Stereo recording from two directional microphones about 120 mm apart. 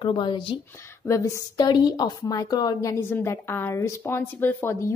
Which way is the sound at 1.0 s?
25° left (ahead or behind).